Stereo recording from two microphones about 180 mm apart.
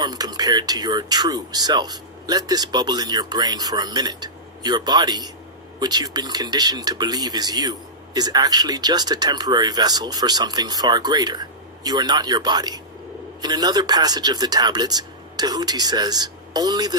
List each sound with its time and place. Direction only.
0.0 s speech: 20° right (ahead or behind)